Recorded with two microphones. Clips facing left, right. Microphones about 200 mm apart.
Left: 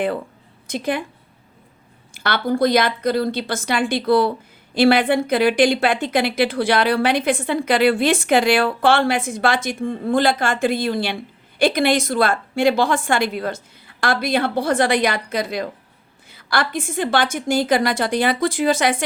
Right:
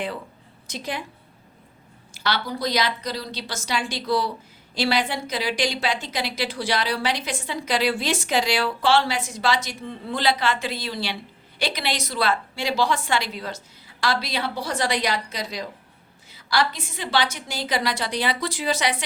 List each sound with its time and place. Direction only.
0.7 s a woman's voice: 55° left (ahead or behind)
2.1 s a woman's voice: 55° left (ahead or behind)